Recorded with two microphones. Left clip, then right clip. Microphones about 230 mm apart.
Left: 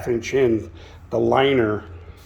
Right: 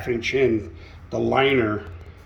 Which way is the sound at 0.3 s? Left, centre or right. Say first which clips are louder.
Left 2 dB; left.